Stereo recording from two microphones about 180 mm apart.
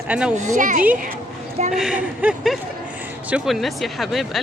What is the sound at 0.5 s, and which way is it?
Speech, 45° right (ahead or behind).